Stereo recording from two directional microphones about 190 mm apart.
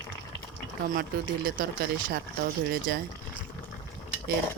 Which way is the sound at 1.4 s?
45° right (ahead or behind).